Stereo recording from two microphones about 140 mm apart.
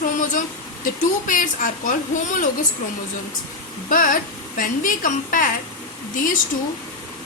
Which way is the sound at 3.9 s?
70° left (ahead or behind).